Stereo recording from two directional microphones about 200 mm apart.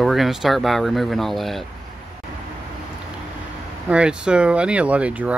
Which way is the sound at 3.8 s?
5° right (ahead or behind).